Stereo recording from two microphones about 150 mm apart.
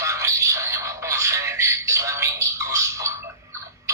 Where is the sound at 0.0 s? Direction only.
20° right (ahead or behind).